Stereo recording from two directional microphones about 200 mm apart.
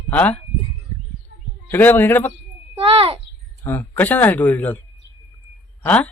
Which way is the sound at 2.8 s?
30° right (ahead or behind).